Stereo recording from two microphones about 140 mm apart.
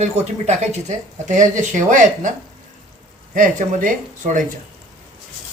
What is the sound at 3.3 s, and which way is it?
Speech, 70° right (ahead or behind).